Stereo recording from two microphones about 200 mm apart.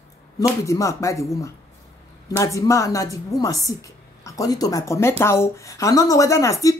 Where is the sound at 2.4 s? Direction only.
15° left (ahead or behind).